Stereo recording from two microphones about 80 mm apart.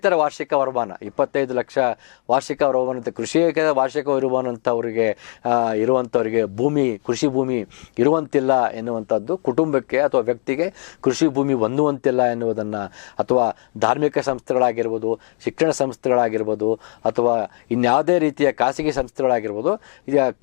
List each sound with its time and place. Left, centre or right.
0.0 s speech: centre